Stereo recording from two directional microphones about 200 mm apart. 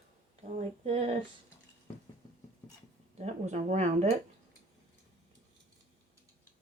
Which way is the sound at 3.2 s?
35° right (ahead or behind).